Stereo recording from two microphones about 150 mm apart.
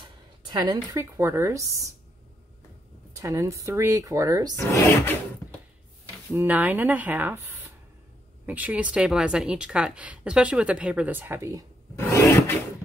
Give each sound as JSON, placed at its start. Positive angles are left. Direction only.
{"t": 0.4, "sound": "a woman's voice", "side_deg": -30}
{"t": 1.1, "sound": "speech", "side_deg": -20}
{"t": 3.2, "sound": "speech", "side_deg": -20}
{"t": 4.6, "sound": "speech", "side_deg": 20}
{"t": 6.3, "sound": "speech", "side_deg": -10}
{"t": 12.1, "sound": "a sound", "side_deg": 15}